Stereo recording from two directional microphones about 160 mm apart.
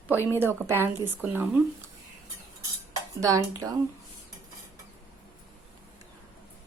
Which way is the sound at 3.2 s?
20° right (ahead or behind).